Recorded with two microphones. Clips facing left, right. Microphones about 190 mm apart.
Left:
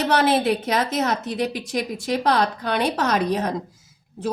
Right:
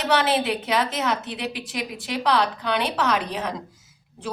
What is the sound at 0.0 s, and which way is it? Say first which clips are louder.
A woman's voice: left 3 dB; 45° left (ahead or behind).